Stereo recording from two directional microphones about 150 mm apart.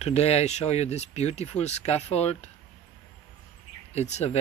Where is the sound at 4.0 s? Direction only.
45° left (ahead or behind).